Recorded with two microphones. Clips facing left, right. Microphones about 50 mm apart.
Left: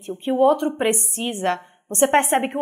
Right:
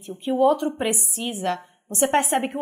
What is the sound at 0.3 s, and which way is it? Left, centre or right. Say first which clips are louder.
A woman's voice: left 2 dB; left.